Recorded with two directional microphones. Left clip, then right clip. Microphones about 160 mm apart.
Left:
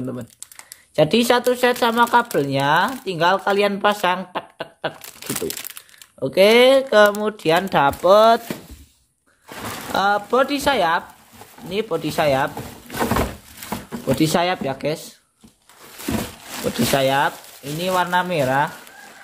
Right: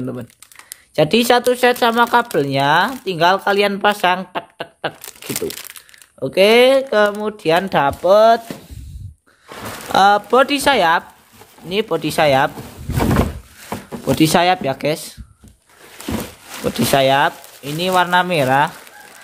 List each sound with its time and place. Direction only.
0.0 s speech: 20° right (ahead or behind)
6.1 s speech: 15° right (ahead or behind)
9.9 s speech: 30° right (ahead or behind)
14.0 s speech: 30° right (ahead or behind)
16.6 s speech: 25° right (ahead or behind)